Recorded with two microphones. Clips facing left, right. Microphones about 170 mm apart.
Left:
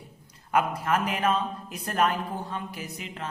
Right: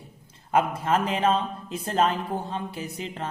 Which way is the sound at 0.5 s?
25° right (ahead or behind).